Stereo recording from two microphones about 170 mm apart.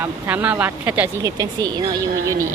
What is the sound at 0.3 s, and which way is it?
Speech, 10° right (ahead or behind).